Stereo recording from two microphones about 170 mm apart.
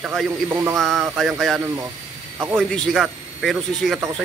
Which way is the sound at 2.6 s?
5° left (ahead or behind).